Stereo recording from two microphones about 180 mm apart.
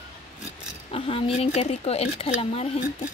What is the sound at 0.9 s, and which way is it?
Speech, 35° left (ahead or behind).